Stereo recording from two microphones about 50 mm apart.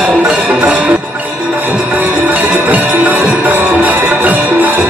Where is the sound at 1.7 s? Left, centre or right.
Right.